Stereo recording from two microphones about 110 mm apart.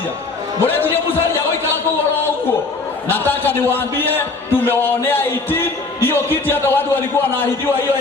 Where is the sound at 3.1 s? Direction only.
20° left (ahead or behind).